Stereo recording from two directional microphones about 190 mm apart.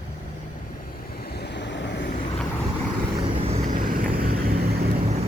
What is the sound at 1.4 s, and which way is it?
Vehicle, 65° left (ahead or behind).